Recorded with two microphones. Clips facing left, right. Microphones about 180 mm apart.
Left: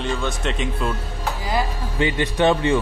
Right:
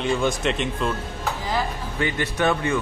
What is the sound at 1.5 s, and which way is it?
Speech, 20° left (ahead or behind).